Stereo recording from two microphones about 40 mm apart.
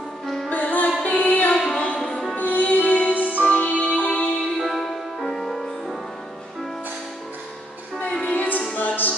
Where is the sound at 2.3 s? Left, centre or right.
Left.